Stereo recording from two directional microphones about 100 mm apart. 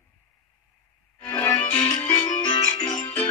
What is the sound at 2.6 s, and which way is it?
Music, 45° left (ahead or behind).